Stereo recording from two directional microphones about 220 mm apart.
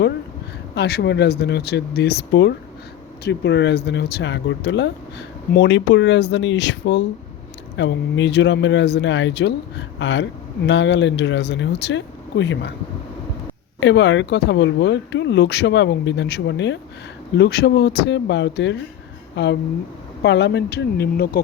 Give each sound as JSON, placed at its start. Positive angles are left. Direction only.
{"t": 0.7, "sound": "speech", "side_deg": 50}
{"t": 13.7, "sound": "speech", "side_deg": 55}